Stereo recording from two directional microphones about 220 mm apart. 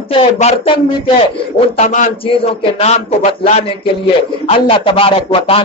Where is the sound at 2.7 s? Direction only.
30° left (ahead or behind).